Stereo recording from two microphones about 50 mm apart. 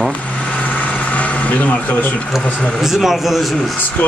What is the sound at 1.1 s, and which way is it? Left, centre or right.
Vehicle, left.